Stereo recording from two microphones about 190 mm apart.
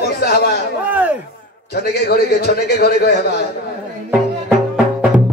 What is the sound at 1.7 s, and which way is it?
A man's voice, 55° left (ahead or behind).